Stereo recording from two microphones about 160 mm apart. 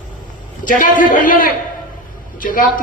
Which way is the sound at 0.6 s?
60° left (ahead or behind).